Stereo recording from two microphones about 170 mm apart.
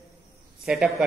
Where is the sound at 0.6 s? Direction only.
Centre (ahead or behind).